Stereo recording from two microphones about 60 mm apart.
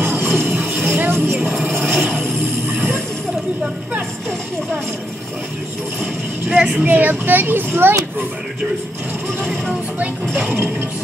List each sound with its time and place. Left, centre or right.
0.0 s music: right
1.8 s a sound: right
6.5 s vehicle: centre
6.9 s a child's voice: right